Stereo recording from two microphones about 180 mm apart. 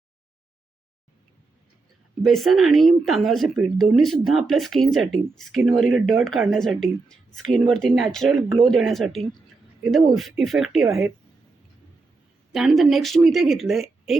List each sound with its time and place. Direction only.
2.2 s speech: centre (ahead or behind)
8.4 s speech: 25° right (ahead or behind)
8.7 s speech: centre (ahead or behind)
10.8 s speech: 15° right (ahead or behind)
12.5 s speech: centre (ahead or behind)